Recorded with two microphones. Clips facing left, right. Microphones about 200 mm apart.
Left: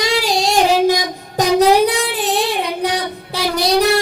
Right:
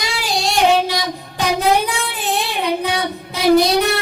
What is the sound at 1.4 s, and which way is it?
Child singing, 40° left (ahead or behind).